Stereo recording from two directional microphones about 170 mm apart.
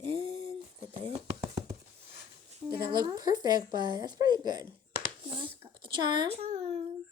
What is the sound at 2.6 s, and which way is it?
Speech, 25° right (ahead or behind).